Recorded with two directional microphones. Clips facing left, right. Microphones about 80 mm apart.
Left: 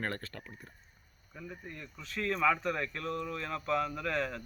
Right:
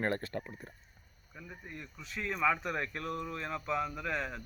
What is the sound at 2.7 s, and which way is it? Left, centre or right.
Speech, right.